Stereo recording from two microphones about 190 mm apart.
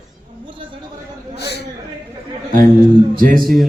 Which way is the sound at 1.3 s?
60° left (ahead or behind).